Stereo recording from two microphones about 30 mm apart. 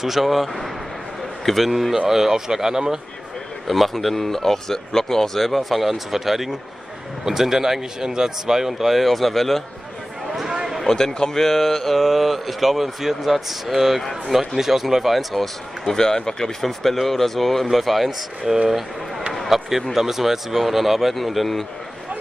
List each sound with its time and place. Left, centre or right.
0.0 s speech: centre
3.6 s speech: centre
10.8 s speech: centre
15.1 s speech: centre
15.9 s speech: left
16.6 s speech: centre